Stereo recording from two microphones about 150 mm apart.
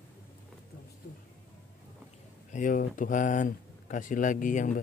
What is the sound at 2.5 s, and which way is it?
Speech, 60° left (ahead or behind).